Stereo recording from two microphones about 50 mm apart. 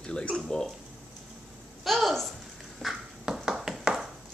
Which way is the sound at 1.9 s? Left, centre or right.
Centre.